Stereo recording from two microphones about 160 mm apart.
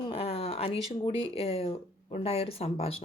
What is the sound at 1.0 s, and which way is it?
Speech, 35° left (ahead or behind).